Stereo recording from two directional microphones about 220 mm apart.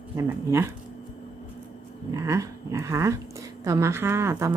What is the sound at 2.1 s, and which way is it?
Speech, 15° right (ahead or behind).